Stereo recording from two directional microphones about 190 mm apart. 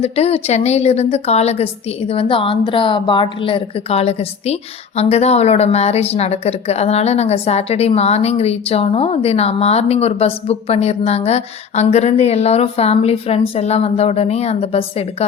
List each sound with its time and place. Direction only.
0.0 s a woman's voice: 35° left (ahead or behind)